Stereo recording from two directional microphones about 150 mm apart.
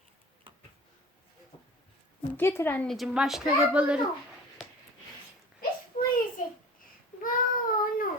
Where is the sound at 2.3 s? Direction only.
15° left (ahead or behind); by 4.0 s 5° right (ahead or behind).